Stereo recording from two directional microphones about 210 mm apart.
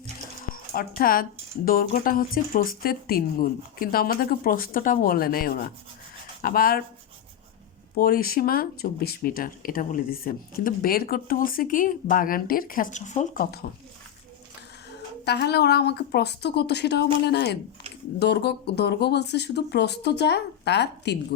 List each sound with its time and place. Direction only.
0.3 s speech: 45° left (ahead or behind)
7.9 s speech: 45° left (ahead or behind)
15.2 s speech: 50° left (ahead or behind)